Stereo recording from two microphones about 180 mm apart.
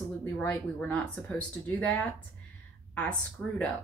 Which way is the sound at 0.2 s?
10° left (ahead or behind).